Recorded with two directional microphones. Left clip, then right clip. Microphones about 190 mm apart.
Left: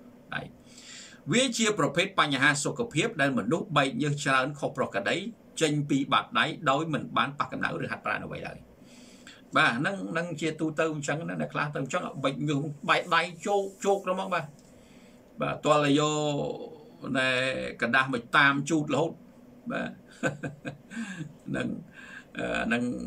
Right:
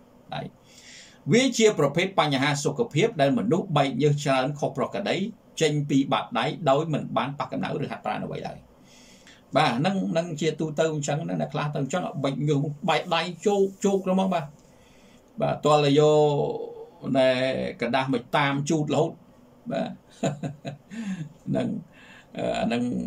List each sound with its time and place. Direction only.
0.8 s speech: 15° right (ahead or behind)
9.5 s speech: 15° right (ahead or behind)